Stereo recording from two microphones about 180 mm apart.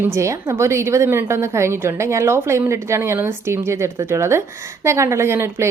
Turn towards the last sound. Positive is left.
turn(degrees=-15)  # may be behind; listen again after turning